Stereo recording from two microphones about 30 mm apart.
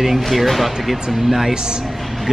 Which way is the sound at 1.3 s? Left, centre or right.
Centre.